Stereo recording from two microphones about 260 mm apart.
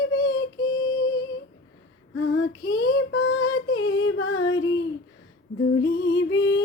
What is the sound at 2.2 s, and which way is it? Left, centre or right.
Female singing, left.